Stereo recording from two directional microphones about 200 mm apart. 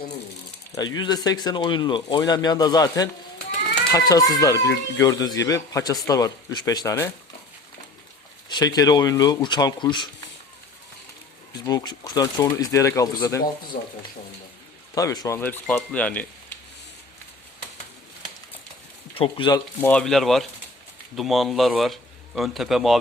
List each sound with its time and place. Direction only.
0.9 s speech: 20° left (ahead or behind)
4.1 s a man's voice: 20° left (ahead or behind)
8.4 s speech: 20° left (ahead or behind)
11.5 s a man's voice: 20° left (ahead or behind)
13.7 s speech: 45° left (ahead or behind)
14.9 s a man's voice: 20° left (ahead or behind)
19.1 s speech: 25° left (ahead or behind)
19.8 s speech: 5° left (ahead or behind)